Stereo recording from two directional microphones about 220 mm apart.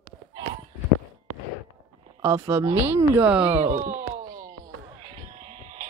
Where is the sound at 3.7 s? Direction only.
35° right (ahead or behind).